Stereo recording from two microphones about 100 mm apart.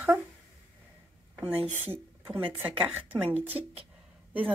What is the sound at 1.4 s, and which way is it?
A woman's voice, 15° right (ahead or behind).